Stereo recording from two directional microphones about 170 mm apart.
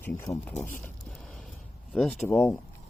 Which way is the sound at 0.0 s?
10° left (ahead or behind).